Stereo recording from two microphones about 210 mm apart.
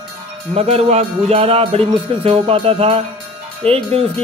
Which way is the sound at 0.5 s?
30° right (ahead or behind).